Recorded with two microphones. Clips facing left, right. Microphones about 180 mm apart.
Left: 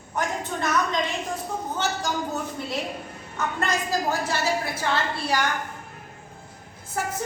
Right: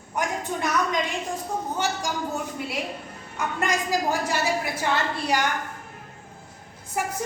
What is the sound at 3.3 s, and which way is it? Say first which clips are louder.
A woman's voice: even; 15° right (ahead or behind).